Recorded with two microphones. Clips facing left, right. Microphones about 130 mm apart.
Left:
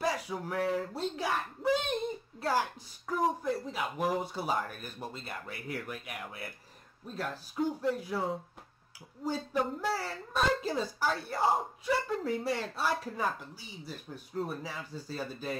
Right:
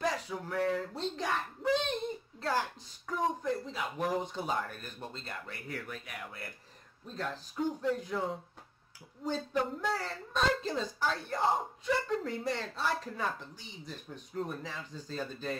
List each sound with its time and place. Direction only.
0.0 s speech: 10° left (ahead or behind)
7.8 s speech: 10° left (ahead or behind)